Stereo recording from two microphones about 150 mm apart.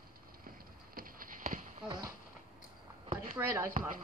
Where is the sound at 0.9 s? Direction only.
70° right (ahead or behind).